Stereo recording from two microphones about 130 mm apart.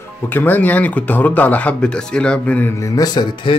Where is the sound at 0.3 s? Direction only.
15° left (ahead or behind).